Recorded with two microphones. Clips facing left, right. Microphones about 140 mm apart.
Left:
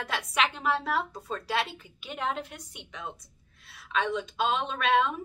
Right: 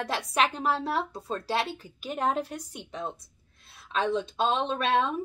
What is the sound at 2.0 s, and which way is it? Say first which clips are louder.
A woman's voice: right 5 dB; 40° right (ahead or behind).